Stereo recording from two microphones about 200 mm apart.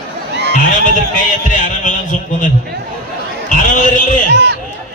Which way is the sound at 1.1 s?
40° left (ahead or behind).